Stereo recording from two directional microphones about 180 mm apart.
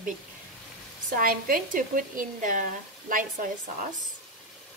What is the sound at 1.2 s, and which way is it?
Speech, 55° right (ahead or behind).